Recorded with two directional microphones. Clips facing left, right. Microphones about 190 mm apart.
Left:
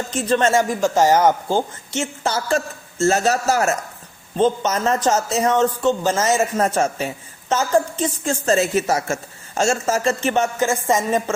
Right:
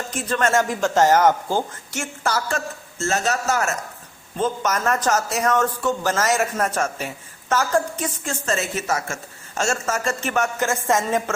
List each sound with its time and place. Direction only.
0.2 s a woman's voice: 30° left (ahead or behind)
0.5 s a woman's voice: 10° left (ahead or behind)
3.0 s a woman's voice: 35° left (ahead or behind)
8.0 s a woman's voice: 35° left (ahead or behind)
10.6 s a woman's voice: 15° left (ahead or behind)